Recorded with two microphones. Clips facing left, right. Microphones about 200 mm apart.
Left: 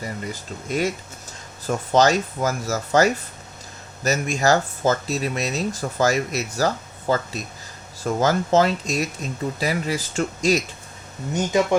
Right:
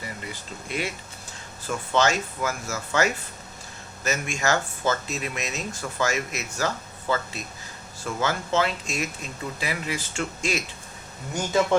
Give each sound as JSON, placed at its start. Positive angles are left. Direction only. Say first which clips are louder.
{"t": 0.0, "sound": "speech", "louder": "left 6 dB", "side_deg": 40}
{"t": 11.3, "sound": "speech", "louder": "left 2 dB", "side_deg": 15}